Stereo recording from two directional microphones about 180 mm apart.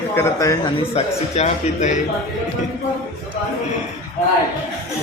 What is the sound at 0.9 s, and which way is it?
A man's voice, 40° left (ahead or behind).